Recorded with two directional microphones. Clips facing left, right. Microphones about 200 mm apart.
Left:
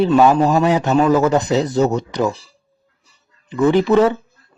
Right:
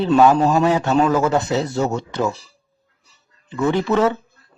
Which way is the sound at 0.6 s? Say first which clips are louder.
Left 2 dB; 15° left (ahead or behind).